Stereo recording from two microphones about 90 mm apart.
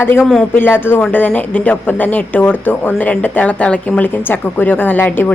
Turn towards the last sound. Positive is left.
turn(degrees=20)  # may be behind; listen again after turning